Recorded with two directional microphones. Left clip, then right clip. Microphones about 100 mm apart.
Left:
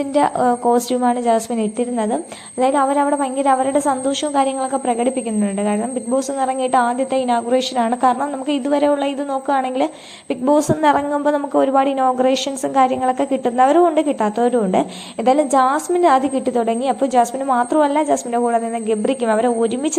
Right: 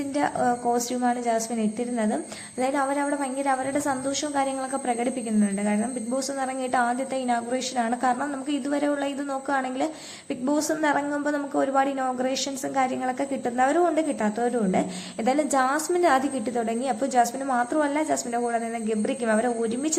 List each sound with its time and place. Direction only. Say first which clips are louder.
0.1 s a woman's voice: left 8 dB; 35° left (ahead or behind)
2.6 s a woman's voice: left 9 dB; 35° left (ahead or behind)